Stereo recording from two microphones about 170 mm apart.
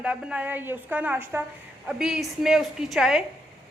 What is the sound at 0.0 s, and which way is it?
A woman's voice, 5° right (ahead or behind).